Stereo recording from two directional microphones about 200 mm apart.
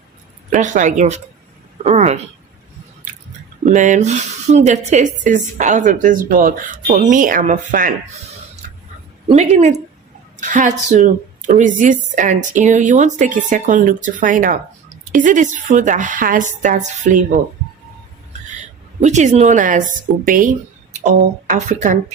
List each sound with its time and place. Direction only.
0.5 s speech: 40° right (ahead or behind)
3.6 s speech: 40° right (ahead or behind)
9.2 s speech: 35° right (ahead or behind)
19.0 s speech: 35° right (ahead or behind)